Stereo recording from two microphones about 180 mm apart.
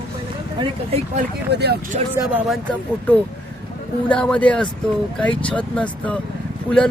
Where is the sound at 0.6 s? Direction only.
25° right (ahead or behind).